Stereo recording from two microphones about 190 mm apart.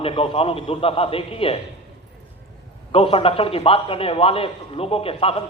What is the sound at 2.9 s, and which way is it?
A man's voice, 30° left (ahead or behind).